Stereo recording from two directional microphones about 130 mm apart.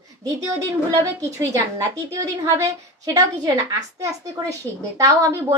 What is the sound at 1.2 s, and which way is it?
A child's voice, 25° right (ahead or behind).